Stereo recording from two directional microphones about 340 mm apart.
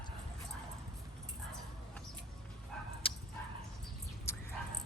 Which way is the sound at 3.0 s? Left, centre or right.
Centre.